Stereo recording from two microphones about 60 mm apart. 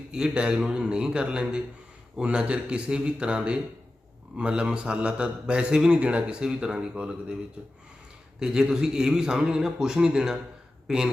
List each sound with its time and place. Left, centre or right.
0.1 s a man's voice: centre
8.4 s a man's voice: centre